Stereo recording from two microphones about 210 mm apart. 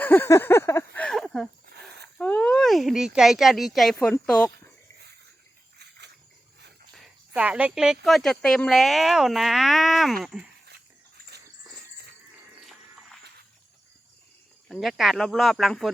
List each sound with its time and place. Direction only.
0.0 s a sound: 10° left (ahead or behind)
2.1 s speech: 5° left (ahead or behind)
4.5 s a sound: 55° right (ahead or behind)
6.9 s speech: 5° right (ahead or behind)
12.6 s music: centre (ahead or behind)
14.7 s speech: centre (ahead or behind)